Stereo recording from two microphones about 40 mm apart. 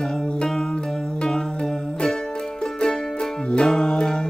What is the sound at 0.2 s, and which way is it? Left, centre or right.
Music, left.